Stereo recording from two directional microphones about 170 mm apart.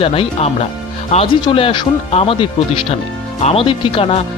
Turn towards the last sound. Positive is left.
turn(degrees=35)  # may be behind; listen again after turning